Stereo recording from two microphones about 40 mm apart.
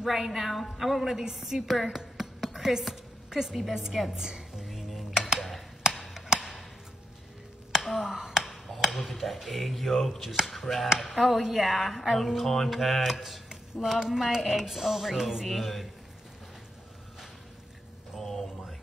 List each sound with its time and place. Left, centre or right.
0.0 s a woman's voice: centre
1.8 s music: centre
3.7 s a woman's voice: centre
4.1 s music: centre
4.6 s music: centre
5.1 s a sound: centre
5.9 s chop: centre
7.8 s finger snapping: centre
8.5 s a sound: centre
8.9 s speech: centre
18.1 s a sound: centre